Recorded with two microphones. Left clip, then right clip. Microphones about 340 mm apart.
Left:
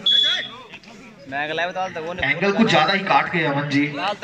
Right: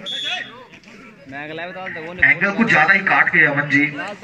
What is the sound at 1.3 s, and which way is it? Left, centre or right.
A man's voice, left.